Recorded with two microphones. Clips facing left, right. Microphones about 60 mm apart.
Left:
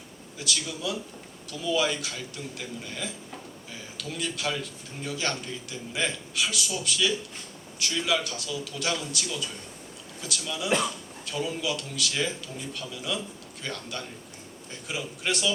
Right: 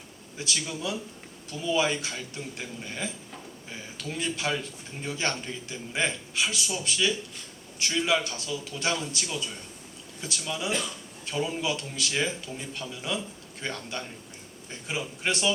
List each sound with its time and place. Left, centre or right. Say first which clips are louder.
0.3 s a man's voice: even; right